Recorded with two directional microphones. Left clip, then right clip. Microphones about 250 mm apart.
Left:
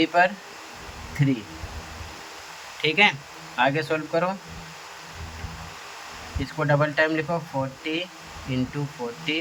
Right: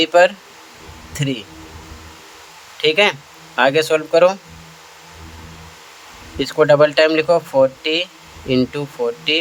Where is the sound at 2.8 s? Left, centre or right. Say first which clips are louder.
Right 5 dB; centre.